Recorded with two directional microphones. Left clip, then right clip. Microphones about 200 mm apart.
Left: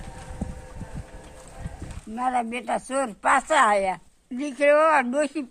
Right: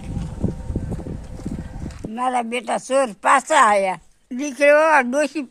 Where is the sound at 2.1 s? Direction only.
35° right (ahead or behind).